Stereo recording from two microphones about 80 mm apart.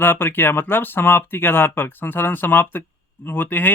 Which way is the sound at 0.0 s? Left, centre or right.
Left.